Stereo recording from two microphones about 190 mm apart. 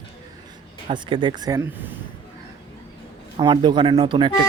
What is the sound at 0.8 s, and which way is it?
Speech, 25° right (ahead or behind).